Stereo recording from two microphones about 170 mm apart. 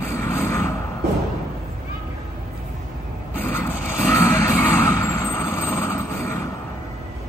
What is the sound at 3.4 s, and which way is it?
Vehicle, 15° left (ahead or behind).